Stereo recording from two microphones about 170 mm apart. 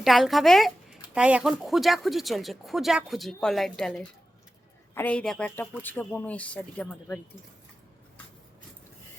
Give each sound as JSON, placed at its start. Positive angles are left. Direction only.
{"t": 0.0, "sound": "speech", "side_deg": 0}